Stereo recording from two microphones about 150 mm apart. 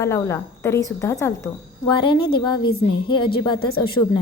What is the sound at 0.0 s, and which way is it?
A woman's voice, 15° left (ahead or behind).